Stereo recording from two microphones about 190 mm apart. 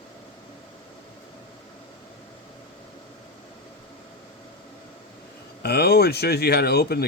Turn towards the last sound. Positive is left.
turn(degrees=55)  # may be behind; listen again after turning